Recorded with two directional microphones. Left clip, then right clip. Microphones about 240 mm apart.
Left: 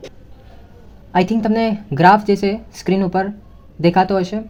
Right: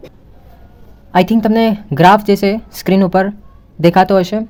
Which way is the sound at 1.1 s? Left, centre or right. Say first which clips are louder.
Right 5 dB; centre.